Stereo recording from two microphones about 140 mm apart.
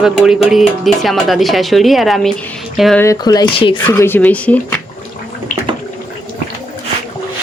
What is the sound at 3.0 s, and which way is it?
Speech, 25° left (ahead or behind).